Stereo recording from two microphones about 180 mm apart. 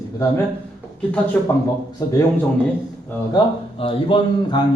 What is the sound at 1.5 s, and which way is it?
Speech, 15° left (ahead or behind).